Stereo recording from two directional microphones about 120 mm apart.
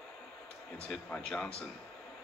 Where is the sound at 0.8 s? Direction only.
5° left (ahead or behind).